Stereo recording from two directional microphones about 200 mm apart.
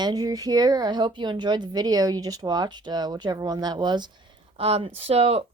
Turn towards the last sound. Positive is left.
turn(degrees=-30)  # may be behind; listen again after turning